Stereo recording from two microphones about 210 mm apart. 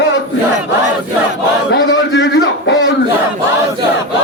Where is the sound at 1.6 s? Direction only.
60° left (ahead or behind).